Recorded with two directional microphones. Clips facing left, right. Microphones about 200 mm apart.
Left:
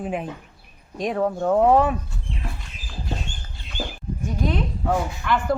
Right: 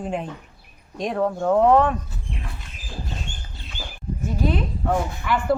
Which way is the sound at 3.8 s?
50° left (ahead or behind).